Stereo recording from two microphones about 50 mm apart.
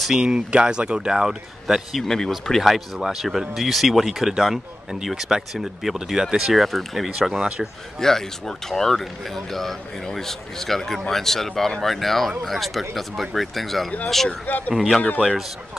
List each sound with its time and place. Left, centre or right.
0.0 s speech: centre
0.5 s speech: right; by 2.0 s centre
2.0 s speech: centre
2.6 s speech: centre
7.2 s speech: centre
8.0 s speech: centre
14.7 s speech: centre